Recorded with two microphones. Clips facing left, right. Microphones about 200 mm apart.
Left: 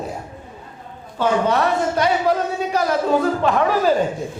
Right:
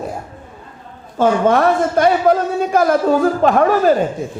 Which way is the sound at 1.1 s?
50° right (ahead or behind).